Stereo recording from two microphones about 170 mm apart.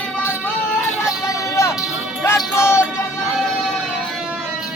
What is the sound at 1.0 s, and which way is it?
Music, 15° left (ahead or behind).